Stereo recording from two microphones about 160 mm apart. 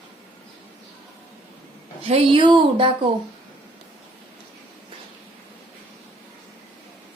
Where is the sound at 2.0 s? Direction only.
35° right (ahead or behind).